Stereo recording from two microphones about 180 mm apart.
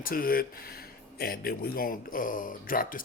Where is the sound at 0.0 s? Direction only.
55° left (ahead or behind).